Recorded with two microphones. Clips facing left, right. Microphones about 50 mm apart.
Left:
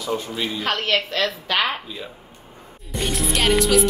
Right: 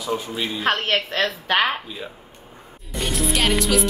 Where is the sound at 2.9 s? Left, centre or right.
Centre.